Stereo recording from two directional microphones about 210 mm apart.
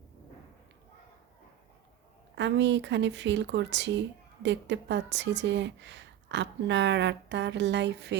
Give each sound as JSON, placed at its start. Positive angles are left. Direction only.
{"t": 2.3, "sound": "speech", "side_deg": -55}